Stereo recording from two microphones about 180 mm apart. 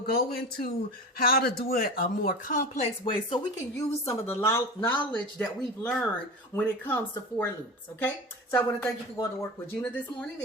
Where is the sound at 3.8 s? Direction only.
15° left (ahead or behind).